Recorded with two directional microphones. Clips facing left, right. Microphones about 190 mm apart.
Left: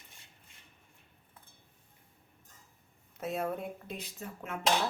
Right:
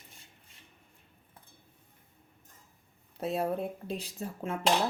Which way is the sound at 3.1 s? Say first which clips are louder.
Right 3 dB; 30° right (ahead or behind).